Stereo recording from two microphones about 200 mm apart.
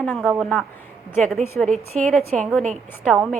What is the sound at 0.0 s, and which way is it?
Speech, centre (ahead or behind).